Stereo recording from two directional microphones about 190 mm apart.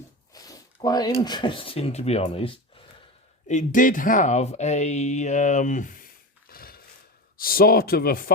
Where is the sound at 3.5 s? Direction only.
40° left (ahead or behind).